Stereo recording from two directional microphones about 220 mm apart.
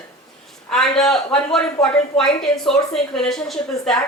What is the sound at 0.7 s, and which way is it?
Speech, centre (ahead or behind).